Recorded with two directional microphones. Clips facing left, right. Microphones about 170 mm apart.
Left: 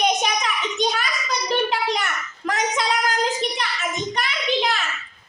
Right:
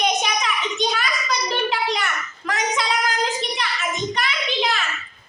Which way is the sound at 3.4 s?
45° left (ahead or behind).